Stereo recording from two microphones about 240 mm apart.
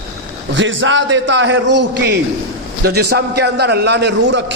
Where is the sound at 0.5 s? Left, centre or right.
Right.